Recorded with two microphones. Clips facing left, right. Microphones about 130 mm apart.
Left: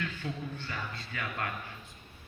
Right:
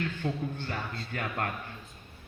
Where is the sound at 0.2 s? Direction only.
40° right (ahead or behind).